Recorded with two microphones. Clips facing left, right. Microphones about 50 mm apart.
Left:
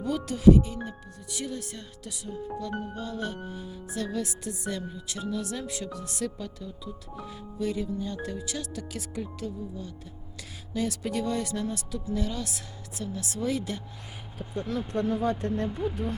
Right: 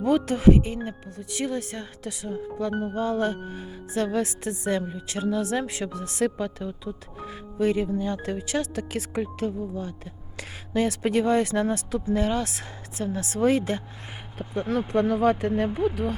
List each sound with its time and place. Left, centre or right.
0.0 s a woman's voice: right
15.0 s speech: right